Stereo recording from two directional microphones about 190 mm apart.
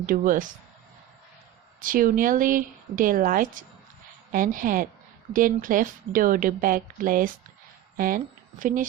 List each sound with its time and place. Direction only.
0.0 s a woman's voice: 45° right (ahead or behind)
1.8 s a woman's voice: 45° right (ahead or behind)